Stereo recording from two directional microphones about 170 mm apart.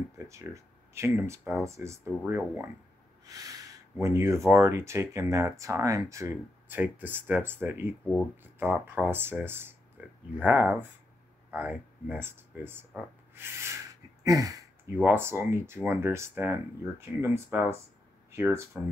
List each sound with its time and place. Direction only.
0.2 s speech: 15° right (ahead or behind)
3.3 s a sound: 20° right (ahead or behind)
4.0 s speech: 15° right (ahead or behind)